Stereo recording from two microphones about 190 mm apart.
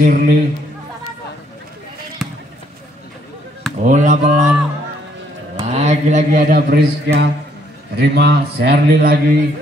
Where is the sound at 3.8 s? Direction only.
40° right (ahead or behind).